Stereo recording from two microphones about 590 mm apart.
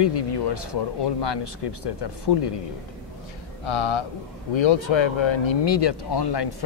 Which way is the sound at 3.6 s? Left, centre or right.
Left.